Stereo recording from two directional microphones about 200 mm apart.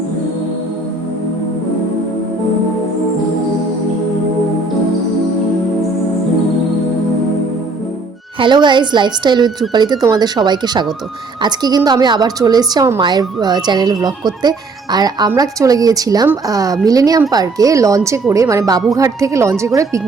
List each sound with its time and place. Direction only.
8.4 s a woman's voice: 25° right (ahead or behind)